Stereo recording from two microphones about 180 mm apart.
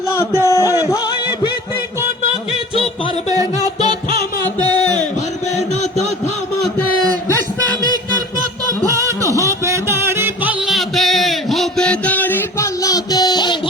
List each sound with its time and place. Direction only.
0.1 s music: 15° left (ahead or behind)
8.8 s music: 20° right (ahead or behind)
10.7 s a sound: centre (ahead or behind); by 13.6 s 25° left (ahead or behind)